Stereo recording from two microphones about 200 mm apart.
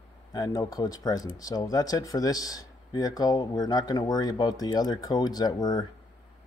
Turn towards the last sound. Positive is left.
turn(degrees=20)  # may be behind; listen again after turning